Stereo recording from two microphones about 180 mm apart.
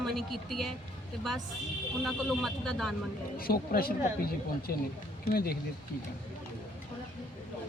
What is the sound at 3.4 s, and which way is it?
Speech, 55° left (ahead or behind).